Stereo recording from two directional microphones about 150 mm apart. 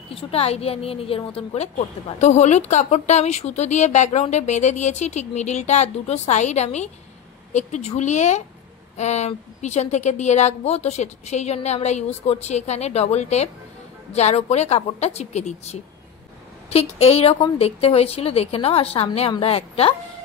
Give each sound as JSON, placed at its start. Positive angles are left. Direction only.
{"t": 0.1, "sound": "a woman's voice", "side_deg": 40}